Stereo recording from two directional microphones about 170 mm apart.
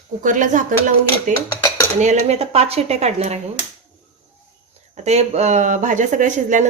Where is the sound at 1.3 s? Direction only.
20° left (ahead or behind).